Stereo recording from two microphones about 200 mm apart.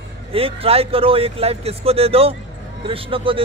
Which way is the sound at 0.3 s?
30° right (ahead or behind).